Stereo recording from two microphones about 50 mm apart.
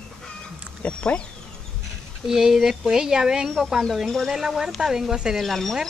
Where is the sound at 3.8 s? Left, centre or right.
Centre.